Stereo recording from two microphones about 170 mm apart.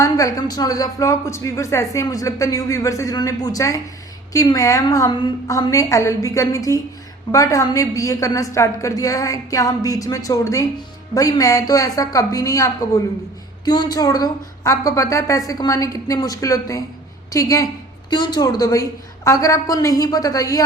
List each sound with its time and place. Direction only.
0.0 s speech: 20° left (ahead or behind)